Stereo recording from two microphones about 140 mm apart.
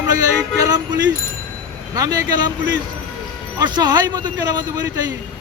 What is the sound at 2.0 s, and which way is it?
Speech, 30° right (ahead or behind).